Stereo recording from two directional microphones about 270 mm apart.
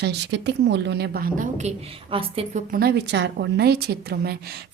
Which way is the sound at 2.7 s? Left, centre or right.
Right.